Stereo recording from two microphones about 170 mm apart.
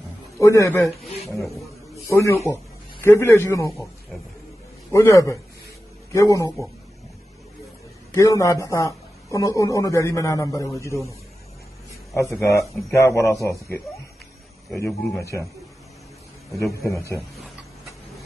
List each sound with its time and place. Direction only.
0.4 s speech: 20° left (ahead or behind)
2.0 s a man's voice: 15° left (ahead or behind)
4.9 s a man's voice: 20° left (ahead or behind)
8.1 s a man's voice: 20° left (ahead or behind)
12.2 s speech: 15° left (ahead or behind)
14.9 s a man's voice: centre (ahead or behind)
16.8 s speech: 15° left (ahead or behind)